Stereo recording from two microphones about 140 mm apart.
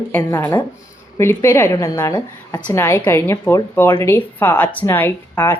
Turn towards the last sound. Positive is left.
turn(degrees=15)  # may be behind; listen again after turning